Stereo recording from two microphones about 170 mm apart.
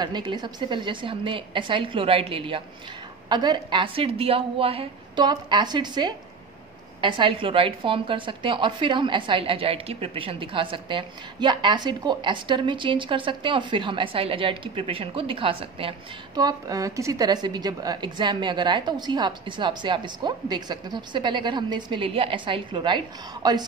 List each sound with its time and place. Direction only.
0.0 s a woman's voice: 25° right (ahead or behind)
16.3 s a woman's voice: 20° right (ahead or behind)